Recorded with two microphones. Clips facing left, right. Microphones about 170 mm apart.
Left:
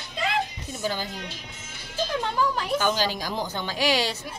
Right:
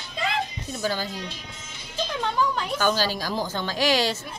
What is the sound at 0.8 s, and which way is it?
Speech, 15° left (ahead or behind).